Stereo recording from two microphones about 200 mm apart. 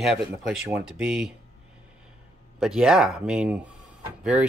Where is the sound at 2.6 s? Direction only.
5° right (ahead or behind).